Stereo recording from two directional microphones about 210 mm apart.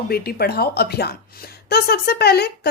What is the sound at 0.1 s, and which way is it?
Speech, 45° left (ahead or behind).